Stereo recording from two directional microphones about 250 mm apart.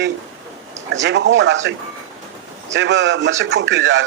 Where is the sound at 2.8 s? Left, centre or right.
Right.